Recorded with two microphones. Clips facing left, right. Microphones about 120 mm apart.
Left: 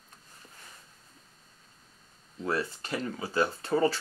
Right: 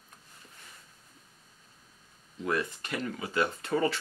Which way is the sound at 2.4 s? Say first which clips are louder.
Even; 35° left (ahead or behind).